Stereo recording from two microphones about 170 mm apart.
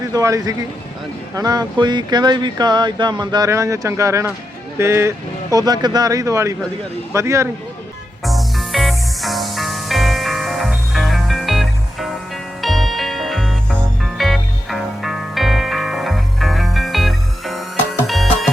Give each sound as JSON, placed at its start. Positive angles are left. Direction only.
{"t": 0.0, "sound": "speech", "side_deg": -20}
{"t": 8.2, "sound": "music", "side_deg": 0}